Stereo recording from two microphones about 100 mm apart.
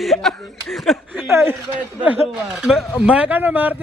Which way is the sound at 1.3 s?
25° right (ahead or behind).